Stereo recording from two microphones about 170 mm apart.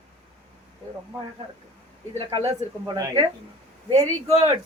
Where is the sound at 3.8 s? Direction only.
40° right (ahead or behind).